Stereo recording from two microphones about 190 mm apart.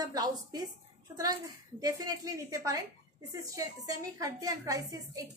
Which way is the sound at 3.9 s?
20° right (ahead or behind).